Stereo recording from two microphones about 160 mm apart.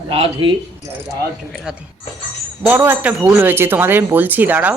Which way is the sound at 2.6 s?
15° right (ahead or behind).